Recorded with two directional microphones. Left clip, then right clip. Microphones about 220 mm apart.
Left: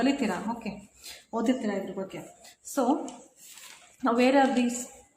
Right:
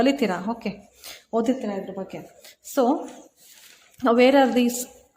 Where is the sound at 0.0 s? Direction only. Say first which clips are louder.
Right 6 dB; 40° right (ahead or behind).